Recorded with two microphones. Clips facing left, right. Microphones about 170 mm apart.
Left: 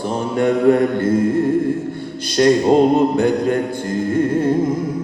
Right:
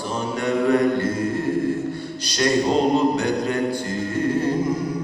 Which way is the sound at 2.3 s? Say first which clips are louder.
Left 7 dB; 55° left (ahead or behind).